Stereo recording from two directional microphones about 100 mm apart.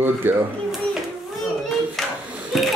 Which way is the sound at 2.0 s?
5° left (ahead or behind).